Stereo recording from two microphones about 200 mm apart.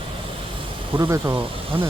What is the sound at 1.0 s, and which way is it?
Speech, 15° right (ahead or behind).